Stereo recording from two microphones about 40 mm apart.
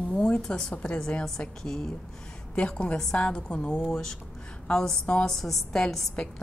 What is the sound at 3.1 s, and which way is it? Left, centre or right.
Speech, left.